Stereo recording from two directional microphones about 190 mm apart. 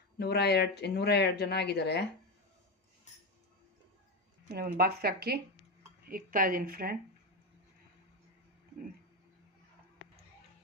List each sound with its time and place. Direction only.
0.2 s speech: 60° left (ahead or behind)
4.4 s speech: 50° right (ahead or behind)